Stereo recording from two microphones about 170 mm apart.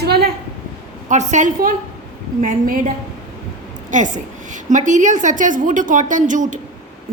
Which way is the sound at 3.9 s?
45° right (ahead or behind).